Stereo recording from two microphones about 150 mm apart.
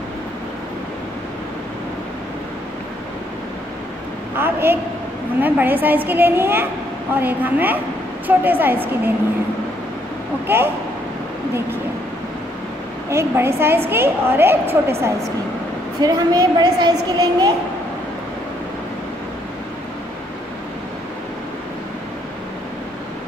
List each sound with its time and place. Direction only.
4.4 s a woman's voice: 15° right (ahead or behind)
10.4 s speech: 15° right (ahead or behind)
13.1 s a woman's voice: 15° right (ahead or behind)
16.0 s a woman's voice: 25° right (ahead or behind)